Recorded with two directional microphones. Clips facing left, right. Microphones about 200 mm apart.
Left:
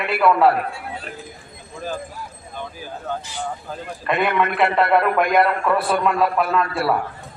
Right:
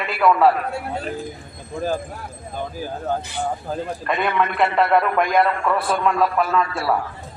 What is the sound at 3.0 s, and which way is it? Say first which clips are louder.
Speech: right 3 dB; 50° right (ahead or behind).